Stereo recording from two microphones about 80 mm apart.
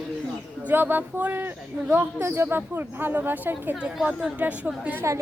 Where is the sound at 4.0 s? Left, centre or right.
Centre.